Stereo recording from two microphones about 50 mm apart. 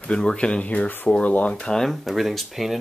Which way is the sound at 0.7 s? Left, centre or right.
Left.